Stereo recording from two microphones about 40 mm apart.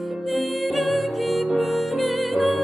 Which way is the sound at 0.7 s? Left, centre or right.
Centre.